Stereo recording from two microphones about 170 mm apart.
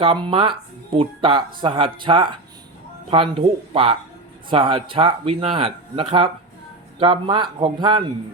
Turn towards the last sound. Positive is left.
turn(degrees=-25)  # may be behind; listen again after turning